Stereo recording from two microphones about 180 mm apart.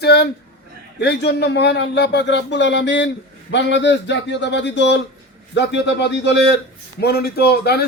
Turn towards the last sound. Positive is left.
turn(degrees=60)  # may be behind; listen again after turning